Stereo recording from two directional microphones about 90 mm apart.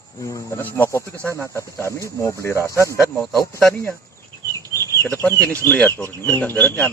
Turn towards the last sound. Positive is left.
turn(degrees=20)  # may be behind; listen again after turning